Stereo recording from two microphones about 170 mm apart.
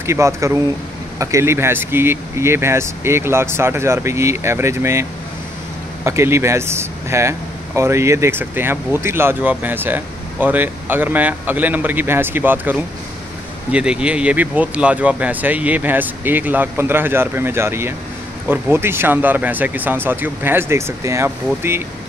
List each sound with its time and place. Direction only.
0.0 s speech: 15° right (ahead or behind)
6.0 s speech: 15° right (ahead or behind)